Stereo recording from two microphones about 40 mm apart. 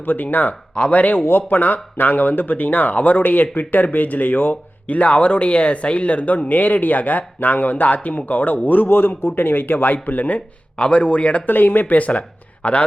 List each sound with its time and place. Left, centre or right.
0.0 s speech: left
0.7 s speech: left
0.9 s speech: left
11.4 s speech: left